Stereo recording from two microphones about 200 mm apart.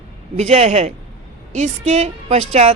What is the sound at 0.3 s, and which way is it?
A woman's voice, 35° right (ahead or behind).